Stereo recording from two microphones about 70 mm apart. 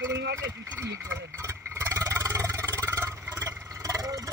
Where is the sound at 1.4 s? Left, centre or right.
Right.